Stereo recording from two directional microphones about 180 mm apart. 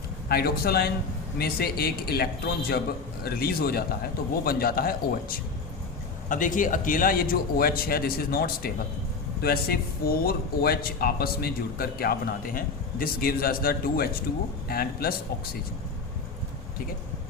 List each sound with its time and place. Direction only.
0.3 s speech: 60° left (ahead or behind)